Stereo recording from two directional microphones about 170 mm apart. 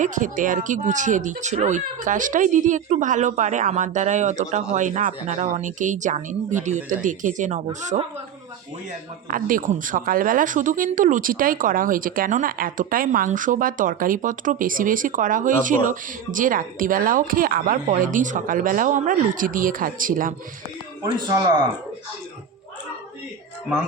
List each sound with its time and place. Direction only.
0.0 s speech: 50° right (ahead or behind)
9.3 s speech: 55° right (ahead or behind)
21.0 s speech: 25° right (ahead or behind)